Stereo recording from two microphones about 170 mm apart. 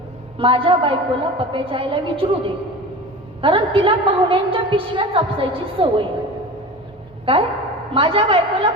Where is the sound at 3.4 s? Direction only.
35° right (ahead or behind).